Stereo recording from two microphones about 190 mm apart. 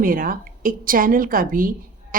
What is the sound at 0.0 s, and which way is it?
A woman's voice, 45° right (ahead or behind).